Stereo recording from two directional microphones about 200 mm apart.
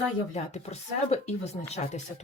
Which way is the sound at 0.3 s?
30° left (ahead or behind).